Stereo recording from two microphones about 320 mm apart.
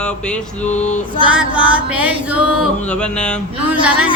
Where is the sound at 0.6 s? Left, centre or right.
Left.